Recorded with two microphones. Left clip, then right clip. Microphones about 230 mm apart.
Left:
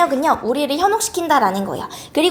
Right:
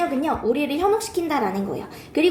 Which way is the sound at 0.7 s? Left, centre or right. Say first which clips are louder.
Left 4 dB; left.